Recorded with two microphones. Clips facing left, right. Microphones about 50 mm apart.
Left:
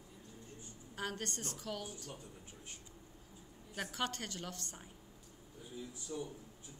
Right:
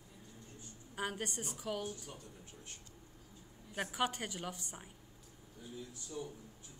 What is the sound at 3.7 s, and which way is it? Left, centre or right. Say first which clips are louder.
A woman's voice: right 3 dB; centre.